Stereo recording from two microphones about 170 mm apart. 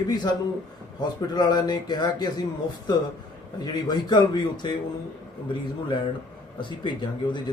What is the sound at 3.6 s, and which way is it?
Speech, 25° left (ahead or behind).